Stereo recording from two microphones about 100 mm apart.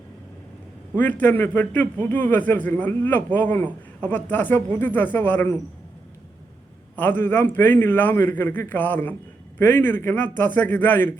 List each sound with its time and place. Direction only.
0.9 s a man's voice: 20° left (ahead or behind)
6.9 s a man's voice: 20° left (ahead or behind)